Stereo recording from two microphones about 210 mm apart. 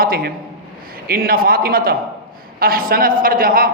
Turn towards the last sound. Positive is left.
turn(degrees=-40)  # may be behind; listen again after turning